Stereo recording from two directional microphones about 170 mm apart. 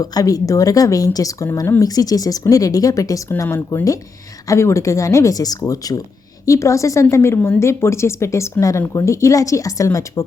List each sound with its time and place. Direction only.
0.0 s a woman's voice: 20° left (ahead or behind)